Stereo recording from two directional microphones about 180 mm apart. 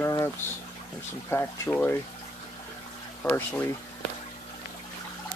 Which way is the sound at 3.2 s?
10° left (ahead or behind).